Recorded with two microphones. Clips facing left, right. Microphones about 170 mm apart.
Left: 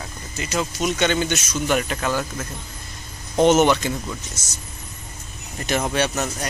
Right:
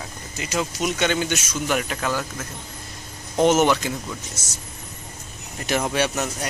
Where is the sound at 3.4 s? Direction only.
5° right (ahead or behind).